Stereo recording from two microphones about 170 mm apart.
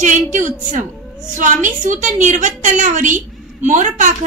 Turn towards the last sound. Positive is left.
turn(degrees=-45)  # may be behind; listen again after turning